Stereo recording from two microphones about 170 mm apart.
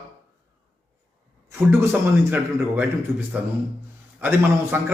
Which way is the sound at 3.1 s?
15° right (ahead or behind).